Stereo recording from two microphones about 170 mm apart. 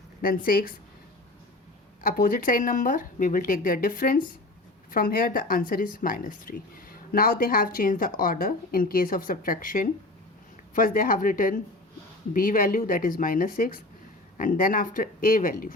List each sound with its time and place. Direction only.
0.2 s speech: 60° left (ahead or behind)
2.0 s speech: 55° left (ahead or behind)